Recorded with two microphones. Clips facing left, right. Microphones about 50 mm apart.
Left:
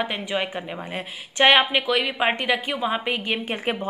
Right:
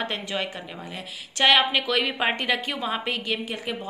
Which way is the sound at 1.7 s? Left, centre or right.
Centre.